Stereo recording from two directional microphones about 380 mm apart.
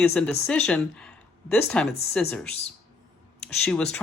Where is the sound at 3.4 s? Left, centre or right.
Centre.